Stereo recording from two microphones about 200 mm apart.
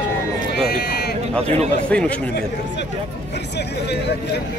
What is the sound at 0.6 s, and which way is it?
Speech, 55° left (ahead or behind).